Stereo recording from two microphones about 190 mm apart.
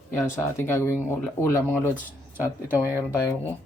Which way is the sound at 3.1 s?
10° left (ahead or behind).